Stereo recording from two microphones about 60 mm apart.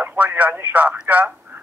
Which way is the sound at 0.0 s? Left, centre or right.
Right.